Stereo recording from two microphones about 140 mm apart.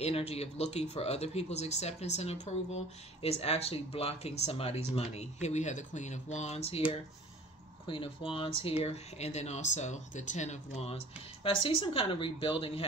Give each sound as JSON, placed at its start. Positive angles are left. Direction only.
{"t": 0.0, "sound": "speech", "side_deg": 45}
{"t": 7.8, "sound": "a woman's voice", "side_deg": 40}